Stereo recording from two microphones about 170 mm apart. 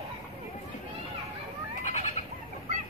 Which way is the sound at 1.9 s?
45° left (ahead or behind).